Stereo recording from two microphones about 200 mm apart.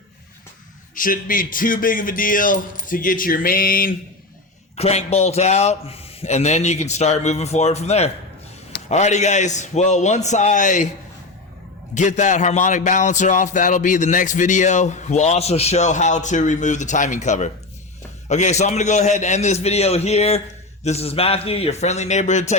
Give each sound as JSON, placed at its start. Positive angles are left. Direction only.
{"t": 0.9, "sound": "speech", "side_deg": 45}
{"t": 4.8, "sound": "speech", "side_deg": 30}
{"t": 11.9, "sound": "speech", "side_deg": 35}